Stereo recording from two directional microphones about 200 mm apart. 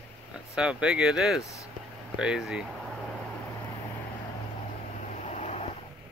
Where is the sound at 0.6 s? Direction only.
5° right (ahead or behind).